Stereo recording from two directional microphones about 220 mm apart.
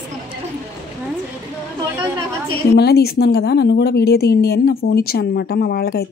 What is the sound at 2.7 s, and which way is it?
Speech, 45° left (ahead or behind).